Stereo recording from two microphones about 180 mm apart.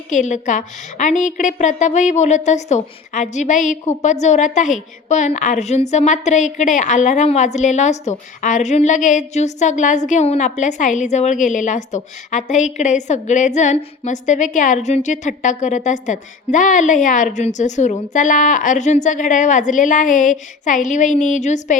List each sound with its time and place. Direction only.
0.1 s a woman's voice: 45° left (ahead or behind)